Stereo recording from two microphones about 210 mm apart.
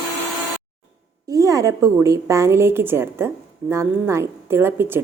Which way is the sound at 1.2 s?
15° right (ahead or behind).